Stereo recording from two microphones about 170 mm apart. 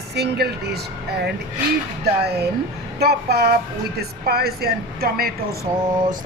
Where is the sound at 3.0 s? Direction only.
70° right (ahead or behind).